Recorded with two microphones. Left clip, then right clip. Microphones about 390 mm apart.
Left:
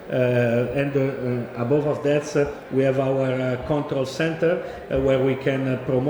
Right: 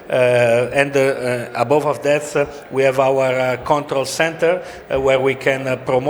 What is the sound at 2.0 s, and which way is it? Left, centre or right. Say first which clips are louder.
A man's voice: right 4 dB; right.